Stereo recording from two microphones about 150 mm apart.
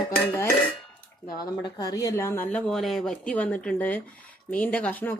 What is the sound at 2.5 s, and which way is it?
Speech, 5° left (ahead or behind).